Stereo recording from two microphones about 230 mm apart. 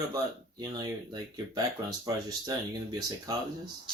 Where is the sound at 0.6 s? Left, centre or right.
Centre.